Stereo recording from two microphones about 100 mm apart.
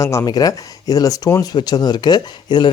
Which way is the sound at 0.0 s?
30° left (ahead or behind).